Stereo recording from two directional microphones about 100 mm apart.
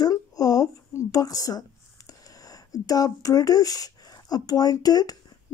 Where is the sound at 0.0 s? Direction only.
40° left (ahead or behind).